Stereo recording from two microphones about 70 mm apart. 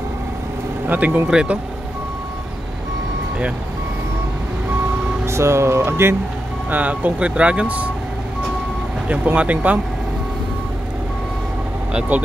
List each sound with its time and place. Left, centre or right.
0.8 s speech: right
5.2 s speech: right
6.7 s speech: right
9.0 s speech: centre
11.9 s speech: centre